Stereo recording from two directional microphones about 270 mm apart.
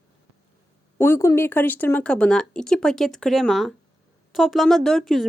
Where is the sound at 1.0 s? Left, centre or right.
Centre.